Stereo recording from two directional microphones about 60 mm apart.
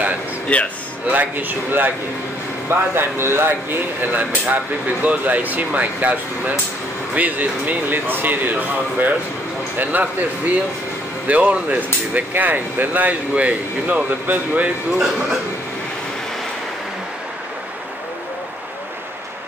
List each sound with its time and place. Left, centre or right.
0.5 s speech: left
1.0 s speech: right
15.0 s speech: centre